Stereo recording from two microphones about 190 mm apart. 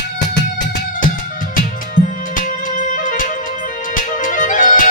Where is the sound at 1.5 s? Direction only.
45° left (ahead or behind).